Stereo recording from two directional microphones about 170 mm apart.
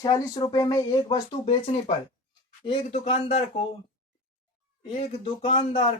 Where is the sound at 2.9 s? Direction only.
40° left (ahead or behind).